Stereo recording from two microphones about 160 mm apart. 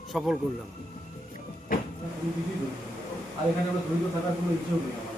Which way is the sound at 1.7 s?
60° left (ahead or behind).